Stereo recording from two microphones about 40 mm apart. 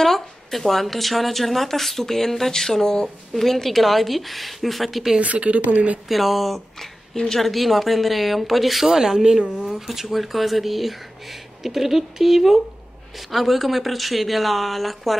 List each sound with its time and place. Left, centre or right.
0.0 s a woman's voice: centre
5.2 s speech: right
6.0 s a woman's voice: centre
8.8 s a woman's voice: centre